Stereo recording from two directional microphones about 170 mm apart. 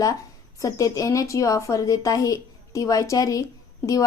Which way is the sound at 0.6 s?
20° left (ahead or behind).